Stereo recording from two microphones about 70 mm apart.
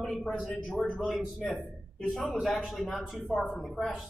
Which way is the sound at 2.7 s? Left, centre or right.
Centre.